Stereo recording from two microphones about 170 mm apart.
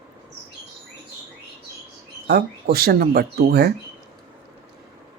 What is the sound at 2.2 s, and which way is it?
Speech, 65° right (ahead or behind).